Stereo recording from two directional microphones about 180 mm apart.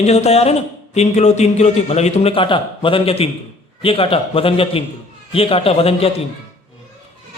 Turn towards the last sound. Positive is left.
turn(degrees=35)  # may be behind; listen again after turning